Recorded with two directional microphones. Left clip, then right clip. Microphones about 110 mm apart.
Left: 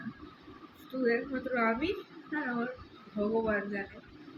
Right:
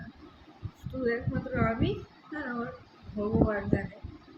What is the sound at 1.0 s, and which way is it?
Speech, 5° right (ahead or behind).